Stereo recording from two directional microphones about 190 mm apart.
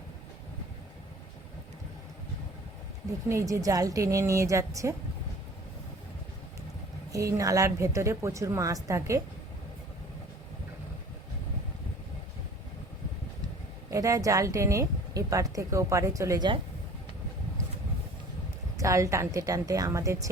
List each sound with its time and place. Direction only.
3.2 s speech: 15° right (ahead or behind)
7.1 s speech: 15° right (ahead or behind)
13.9 s speech: 15° right (ahead or behind)
18.8 s speech: 15° right (ahead or behind)